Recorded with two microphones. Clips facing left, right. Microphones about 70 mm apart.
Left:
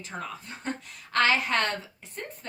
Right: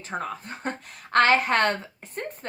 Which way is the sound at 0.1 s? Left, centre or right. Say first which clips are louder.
Right 6 dB; right.